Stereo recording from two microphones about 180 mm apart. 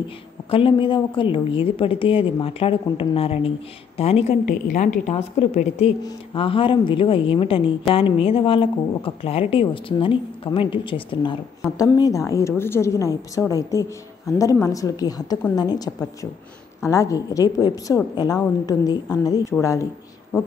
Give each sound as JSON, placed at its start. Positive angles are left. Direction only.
{"t": 0.5, "sound": "a woman's voice", "side_deg": 30}
{"t": 4.5, "sound": "a woman's voice", "side_deg": 45}
{"t": 5.0, "sound": "a woman's voice", "side_deg": 35}